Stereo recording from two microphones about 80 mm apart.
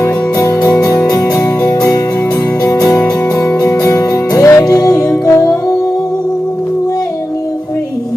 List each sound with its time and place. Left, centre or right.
0.0 s music: left
3.5 s music: left
3.8 s music: left